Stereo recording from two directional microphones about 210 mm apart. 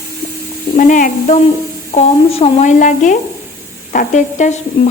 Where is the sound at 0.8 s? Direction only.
40° left (ahead or behind).